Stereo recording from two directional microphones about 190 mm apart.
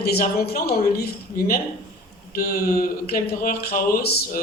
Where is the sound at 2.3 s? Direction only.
50° left (ahead or behind).